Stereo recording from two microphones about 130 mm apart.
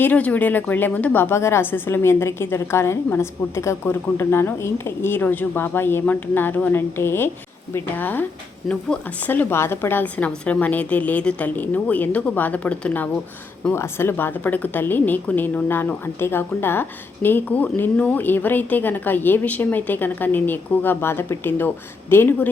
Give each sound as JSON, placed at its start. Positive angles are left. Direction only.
{"t": 0.0, "sound": "a woman's voice", "side_deg": 10}